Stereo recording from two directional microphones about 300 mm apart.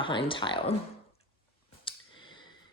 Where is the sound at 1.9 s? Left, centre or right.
Centre.